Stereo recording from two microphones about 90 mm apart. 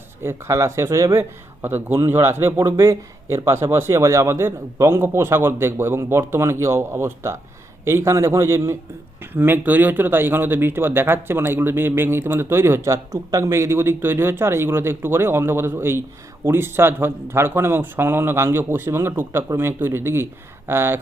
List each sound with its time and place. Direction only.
0.2 s speech: 30° right (ahead or behind)
1.2 s speech: 25° right (ahead or behind)